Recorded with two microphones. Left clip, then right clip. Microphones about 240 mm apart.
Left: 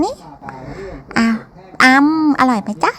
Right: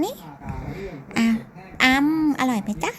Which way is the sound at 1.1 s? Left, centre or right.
Centre.